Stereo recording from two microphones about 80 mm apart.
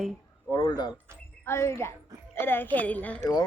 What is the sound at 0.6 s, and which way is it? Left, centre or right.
Speech, left.